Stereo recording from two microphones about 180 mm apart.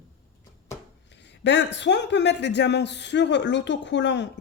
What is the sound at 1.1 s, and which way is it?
A man's voice, 75° left (ahead or behind).